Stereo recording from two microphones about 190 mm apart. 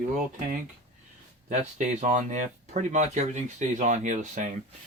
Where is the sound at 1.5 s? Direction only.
35° right (ahead or behind).